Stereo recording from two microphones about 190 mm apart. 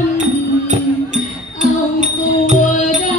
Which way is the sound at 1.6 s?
35° right (ahead or behind).